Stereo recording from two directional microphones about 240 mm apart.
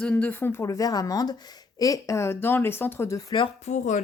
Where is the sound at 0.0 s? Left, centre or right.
Centre.